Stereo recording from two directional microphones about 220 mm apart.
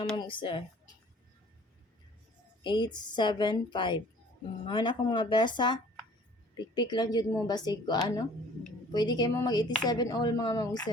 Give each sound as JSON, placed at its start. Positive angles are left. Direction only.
{"t": 0.2, "sound": "speech", "side_deg": 20}
{"t": 2.6, "sound": "a woman's voice", "side_deg": 20}